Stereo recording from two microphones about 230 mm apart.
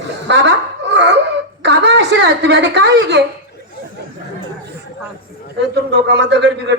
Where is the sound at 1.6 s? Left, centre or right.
Right.